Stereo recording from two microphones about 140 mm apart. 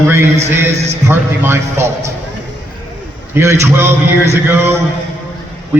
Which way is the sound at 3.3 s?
20° right (ahead or behind).